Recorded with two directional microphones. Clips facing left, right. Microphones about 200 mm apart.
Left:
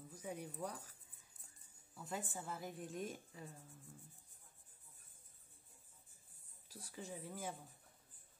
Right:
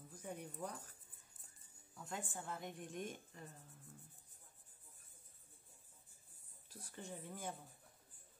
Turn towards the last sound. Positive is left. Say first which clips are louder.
# left 1 dB
turn(degrees=0)  # may be behind; listen again after turning